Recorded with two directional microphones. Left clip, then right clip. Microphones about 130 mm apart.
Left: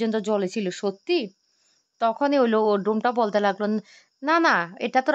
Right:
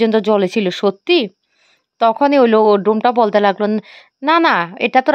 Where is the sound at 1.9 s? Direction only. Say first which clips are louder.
Right 9 dB; 35° right (ahead or behind).